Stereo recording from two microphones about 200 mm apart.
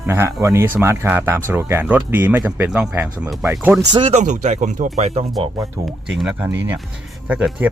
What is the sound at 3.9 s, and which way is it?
Speech, 30° right (ahead or behind).